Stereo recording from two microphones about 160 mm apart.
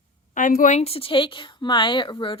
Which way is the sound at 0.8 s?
35° left (ahead or behind).